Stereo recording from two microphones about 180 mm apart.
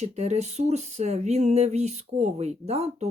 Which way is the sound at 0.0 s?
40° right (ahead or behind).